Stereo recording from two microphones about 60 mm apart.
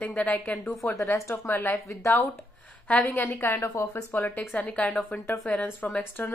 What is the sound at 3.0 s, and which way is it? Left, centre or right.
Speech, left.